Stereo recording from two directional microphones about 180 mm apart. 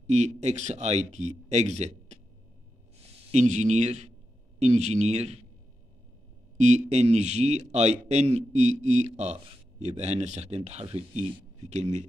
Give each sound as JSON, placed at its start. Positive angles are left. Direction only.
{"t": 0.0, "sound": "a man's voice", "side_deg": -40}
{"t": 3.3, "sound": "a man's voice", "side_deg": -40}
{"t": 6.6, "sound": "a man's voice", "side_deg": -40}